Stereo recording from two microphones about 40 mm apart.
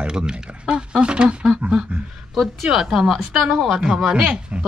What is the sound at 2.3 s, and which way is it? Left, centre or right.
Speech, centre.